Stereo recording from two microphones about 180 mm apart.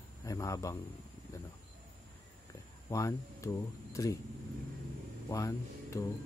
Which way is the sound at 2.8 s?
15° left (ahead or behind).